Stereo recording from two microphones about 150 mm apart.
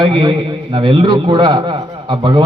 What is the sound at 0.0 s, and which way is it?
A man's voice, 30° right (ahead or behind).